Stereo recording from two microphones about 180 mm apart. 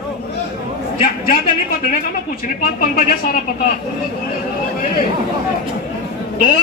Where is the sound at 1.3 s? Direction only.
55° left (ahead or behind).